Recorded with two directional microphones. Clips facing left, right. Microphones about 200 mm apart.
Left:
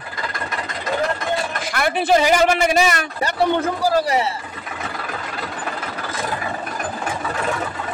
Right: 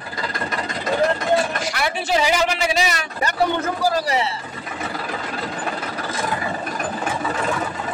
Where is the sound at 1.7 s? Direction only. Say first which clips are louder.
Left 5 dB; 55° left (ahead or behind).